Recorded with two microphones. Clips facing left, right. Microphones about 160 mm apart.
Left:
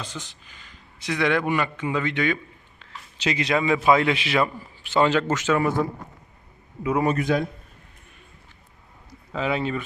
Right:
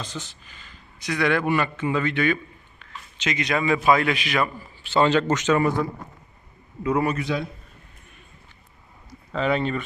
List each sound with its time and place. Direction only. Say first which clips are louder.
0.0 s a man's voice: right 1 dB; 10° left (ahead or behind)
3.2 s a man's voice: left 2 dB; 30° left (ahead or behind)
4.8 s speech: right 1 dB; 15° left (ahead or behind)
6.8 s speech: even; 10° left (ahead or behind)
7.2 s a man's voice: left 4 dB; 50° left (ahead or behind)
9.3 s speech: right 2 dB; 5° left (ahead or behind)